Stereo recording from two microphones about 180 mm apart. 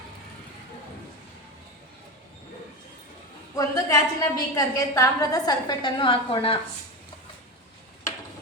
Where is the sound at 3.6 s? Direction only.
20° left (ahead or behind).